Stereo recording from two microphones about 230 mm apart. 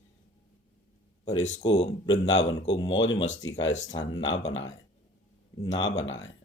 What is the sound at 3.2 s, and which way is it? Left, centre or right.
Speech, left.